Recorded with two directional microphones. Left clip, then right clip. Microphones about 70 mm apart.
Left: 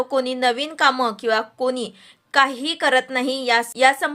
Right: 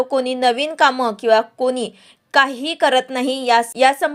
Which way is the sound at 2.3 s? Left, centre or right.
Right.